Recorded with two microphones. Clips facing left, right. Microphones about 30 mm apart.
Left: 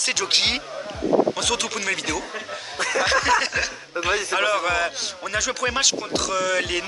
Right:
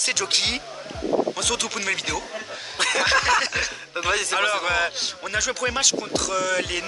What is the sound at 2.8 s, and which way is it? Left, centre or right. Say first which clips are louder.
Snicker: right 1 dB; right.